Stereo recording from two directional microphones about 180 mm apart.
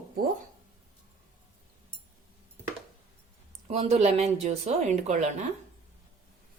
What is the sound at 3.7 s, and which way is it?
Speech, 35° right (ahead or behind).